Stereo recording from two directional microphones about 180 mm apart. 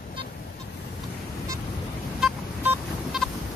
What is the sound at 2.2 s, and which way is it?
Vehicle, centre (ahead or behind).